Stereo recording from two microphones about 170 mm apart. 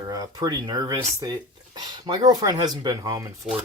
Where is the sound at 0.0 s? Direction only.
20° right (ahead or behind).